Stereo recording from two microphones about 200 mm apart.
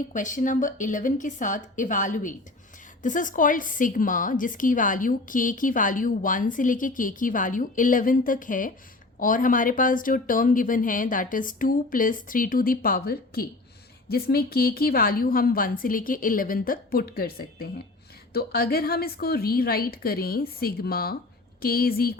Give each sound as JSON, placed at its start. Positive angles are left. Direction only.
{"t": 0.1, "sound": "a woman's voice", "side_deg": 40}